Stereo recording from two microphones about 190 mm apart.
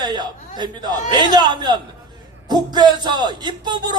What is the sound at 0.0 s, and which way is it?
A man's voice, 20° right (ahead or behind).